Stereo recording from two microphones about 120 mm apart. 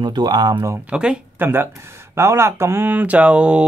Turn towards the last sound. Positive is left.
turn(degrees=-10)  # may be behind; listen again after turning